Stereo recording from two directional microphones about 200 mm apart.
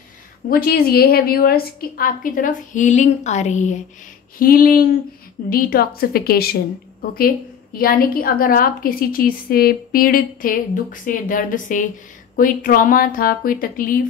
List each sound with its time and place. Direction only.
0.5 s a woman's voice: 45° left (ahead or behind)
4.4 s a woman's voice: 45° left (ahead or behind)